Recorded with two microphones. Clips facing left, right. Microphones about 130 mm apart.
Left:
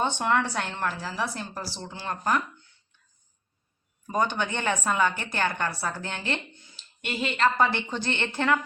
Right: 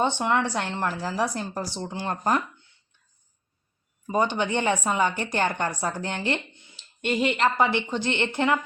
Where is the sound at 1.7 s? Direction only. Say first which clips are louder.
Right 4 dB; 20° right (ahead or behind).